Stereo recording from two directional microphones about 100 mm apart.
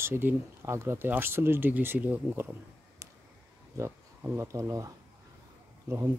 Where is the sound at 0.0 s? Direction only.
25° right (ahead or behind).